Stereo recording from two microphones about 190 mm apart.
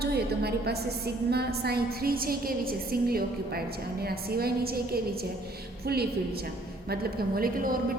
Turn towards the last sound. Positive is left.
turn(degrees=-50)  # may be behind; listen again after turning